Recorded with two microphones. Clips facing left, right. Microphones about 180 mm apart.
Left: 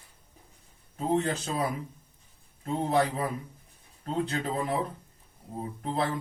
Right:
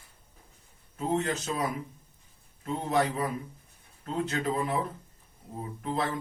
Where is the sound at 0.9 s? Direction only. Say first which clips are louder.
Left 2 dB; 30° left (ahead or behind).